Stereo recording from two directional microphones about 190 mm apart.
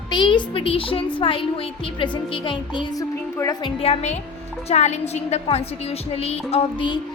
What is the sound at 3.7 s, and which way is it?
A woman's voice, 30° left (ahead or behind).